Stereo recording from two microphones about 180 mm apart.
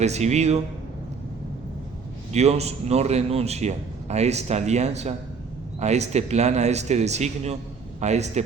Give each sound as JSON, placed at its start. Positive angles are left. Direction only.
{"t": 0.0, "sound": "a man's voice", "side_deg": -40}
{"t": 2.3, "sound": "a man's voice", "side_deg": -35}